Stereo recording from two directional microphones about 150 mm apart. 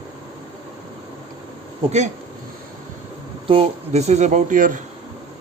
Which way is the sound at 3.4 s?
40° right (ahead or behind).